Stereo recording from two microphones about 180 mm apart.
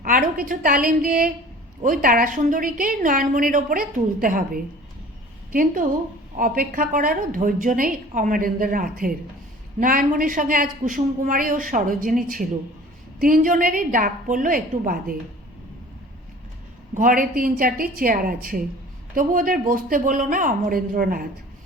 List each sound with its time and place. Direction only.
0.0 s a woman's voice: 50° right (ahead or behind)
16.9 s a woman's voice: 50° right (ahead or behind)